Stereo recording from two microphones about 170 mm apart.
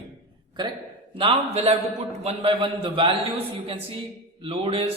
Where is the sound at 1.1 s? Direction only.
30° right (ahead or behind).